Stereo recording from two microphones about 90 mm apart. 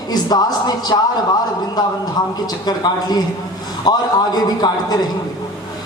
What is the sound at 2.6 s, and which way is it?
A man's voice, 50° left (ahead or behind).